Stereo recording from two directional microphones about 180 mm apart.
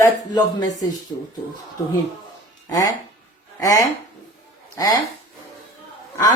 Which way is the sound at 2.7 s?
20° left (ahead or behind).